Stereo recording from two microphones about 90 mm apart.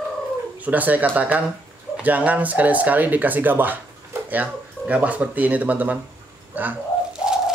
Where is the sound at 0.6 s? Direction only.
20° right (ahead or behind).